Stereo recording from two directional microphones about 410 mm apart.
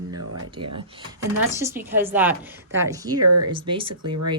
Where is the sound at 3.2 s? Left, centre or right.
Right.